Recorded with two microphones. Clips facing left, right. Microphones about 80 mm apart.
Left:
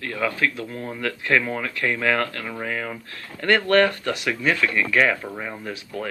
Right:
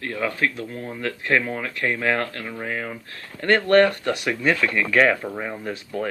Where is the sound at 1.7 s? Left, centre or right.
Right.